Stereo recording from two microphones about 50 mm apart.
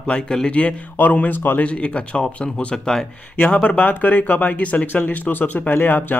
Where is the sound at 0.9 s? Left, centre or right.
Left.